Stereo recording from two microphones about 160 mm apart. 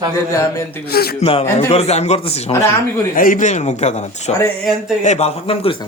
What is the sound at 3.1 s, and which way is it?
A man's voice, 55° left (ahead or behind).